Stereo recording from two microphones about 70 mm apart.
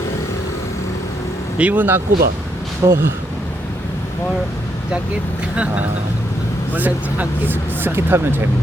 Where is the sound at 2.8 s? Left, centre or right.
Right.